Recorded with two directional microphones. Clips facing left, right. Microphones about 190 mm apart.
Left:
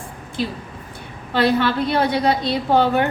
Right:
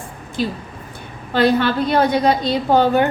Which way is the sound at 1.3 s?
45° right (ahead or behind).